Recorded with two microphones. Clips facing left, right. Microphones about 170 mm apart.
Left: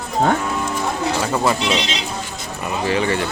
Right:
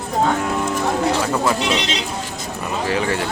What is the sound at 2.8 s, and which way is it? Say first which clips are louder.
Speech: left 2 dB; centre (ahead or behind).